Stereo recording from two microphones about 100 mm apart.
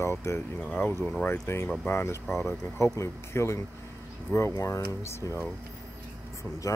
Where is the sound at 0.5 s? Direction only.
15° left (ahead or behind).